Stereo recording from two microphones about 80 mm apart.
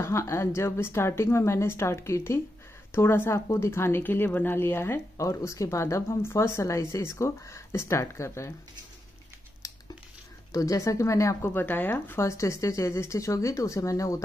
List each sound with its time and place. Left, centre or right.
0.0 s speech: left
10.5 s speech: left
11.5 s speech: left